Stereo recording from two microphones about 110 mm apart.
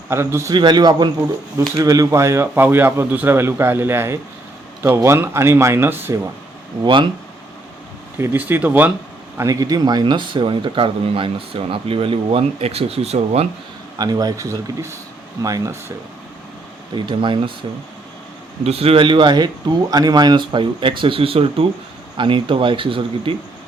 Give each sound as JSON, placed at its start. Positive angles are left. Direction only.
{"t": 0.1, "sound": "speech", "side_deg": -25}
{"t": 0.5, "sound": "speech", "side_deg": -40}
{"t": 6.8, "sound": "speech", "side_deg": -45}
{"t": 8.2, "sound": "speech", "side_deg": -20}
{"t": 9.4, "sound": "speech", "side_deg": -30}
{"t": 14.0, "sound": "speech", "side_deg": -35}
{"t": 16.9, "sound": "speech", "side_deg": -45}
{"t": 18.6, "sound": "speech", "side_deg": -65}